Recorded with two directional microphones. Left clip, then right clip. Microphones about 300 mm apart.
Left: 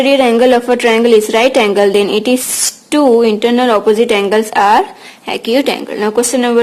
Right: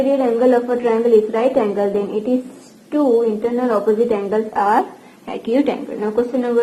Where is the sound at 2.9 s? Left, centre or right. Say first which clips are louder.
Left 6 dB; left.